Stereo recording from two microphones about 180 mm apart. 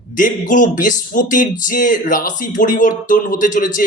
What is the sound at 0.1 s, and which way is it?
Speech, 45° left (ahead or behind).